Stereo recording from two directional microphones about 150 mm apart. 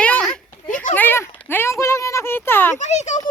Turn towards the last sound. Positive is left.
turn(degrees=50)  # may be behind; listen again after turning